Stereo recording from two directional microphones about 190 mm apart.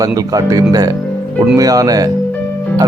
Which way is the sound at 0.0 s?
20° right (ahead or behind).